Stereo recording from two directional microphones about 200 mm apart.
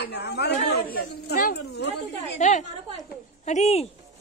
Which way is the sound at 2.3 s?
35° left (ahead or behind).